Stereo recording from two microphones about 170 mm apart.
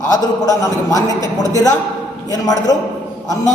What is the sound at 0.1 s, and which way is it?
A man's voice, 20° left (ahead or behind).